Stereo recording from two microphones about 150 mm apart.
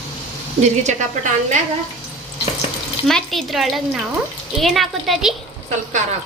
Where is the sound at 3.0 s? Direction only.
Centre (ahead or behind).